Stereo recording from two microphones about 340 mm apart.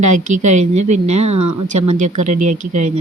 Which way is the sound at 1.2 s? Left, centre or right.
Right.